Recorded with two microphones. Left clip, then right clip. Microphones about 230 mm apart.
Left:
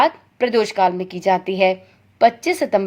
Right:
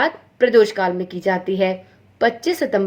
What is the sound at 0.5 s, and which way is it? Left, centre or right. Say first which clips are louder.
A woman's voice: even; left.